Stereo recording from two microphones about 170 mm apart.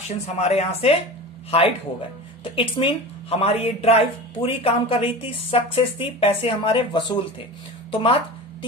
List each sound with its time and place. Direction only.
0.4 s a woman's voice: 40° left (ahead or behind)